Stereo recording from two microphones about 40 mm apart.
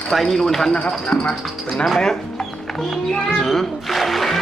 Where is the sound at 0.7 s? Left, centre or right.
Left.